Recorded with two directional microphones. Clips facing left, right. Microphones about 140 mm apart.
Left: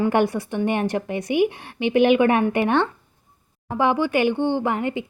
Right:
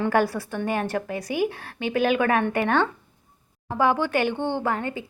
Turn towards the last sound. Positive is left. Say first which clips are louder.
# left 3 dB
turn(degrees=15)  # may be behind; listen again after turning